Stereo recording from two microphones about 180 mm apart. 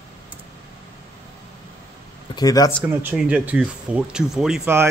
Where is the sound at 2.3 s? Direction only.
20° left (ahead or behind).